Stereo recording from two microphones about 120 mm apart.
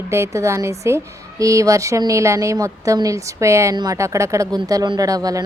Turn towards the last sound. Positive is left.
turn(degrees=-30)  # may be behind; listen again after turning